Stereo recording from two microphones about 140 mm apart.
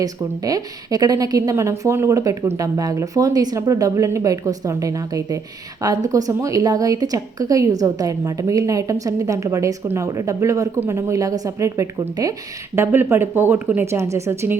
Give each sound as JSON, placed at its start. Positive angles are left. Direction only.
{"t": 0.0, "sound": "a woman's voice", "side_deg": -25}